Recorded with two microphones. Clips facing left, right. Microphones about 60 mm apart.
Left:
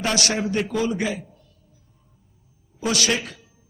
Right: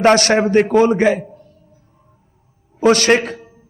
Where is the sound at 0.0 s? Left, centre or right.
Right.